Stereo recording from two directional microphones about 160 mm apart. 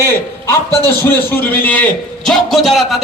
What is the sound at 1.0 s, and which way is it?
A man's voice, 15° left (ahead or behind).